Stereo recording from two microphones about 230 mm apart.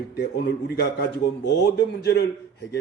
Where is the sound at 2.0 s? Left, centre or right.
Left.